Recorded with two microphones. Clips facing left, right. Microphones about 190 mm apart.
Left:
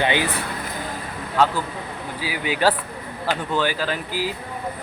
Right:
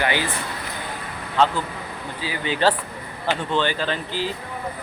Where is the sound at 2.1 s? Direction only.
10° left (ahead or behind).